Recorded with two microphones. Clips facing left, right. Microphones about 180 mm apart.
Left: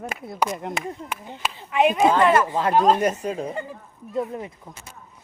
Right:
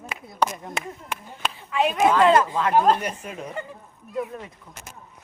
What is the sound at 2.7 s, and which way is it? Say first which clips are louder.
Speech: left 1 dB; 5° right (ahead or behind).